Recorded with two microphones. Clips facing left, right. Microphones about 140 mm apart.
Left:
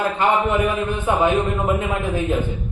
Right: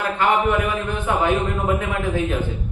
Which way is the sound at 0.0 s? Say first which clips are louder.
Left 1 dB; 20° left (ahead or behind).